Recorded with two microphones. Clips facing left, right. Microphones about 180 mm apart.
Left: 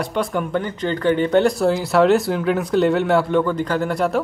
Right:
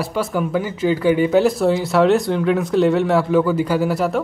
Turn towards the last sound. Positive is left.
turn(degrees=-5)  # may be behind; listen again after turning